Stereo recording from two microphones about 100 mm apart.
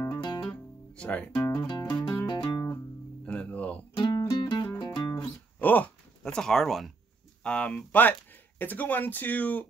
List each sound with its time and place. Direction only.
0.1 s guitar: 50° left (ahead or behind)
0.4 s guitar: 10° left (ahead or behind)
1.5 s music: 45° left (ahead or behind)
3.3 s music: 15° left (ahead or behind)
4.4 s music: 55° left (ahead or behind)
5.6 s dog: 15° left (ahead or behind)
6.2 s speech: 5° left (ahead or behind)
7.4 s speech: 10° left (ahead or behind)